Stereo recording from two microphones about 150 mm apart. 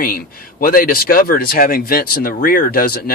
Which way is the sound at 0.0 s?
75° left (ahead or behind).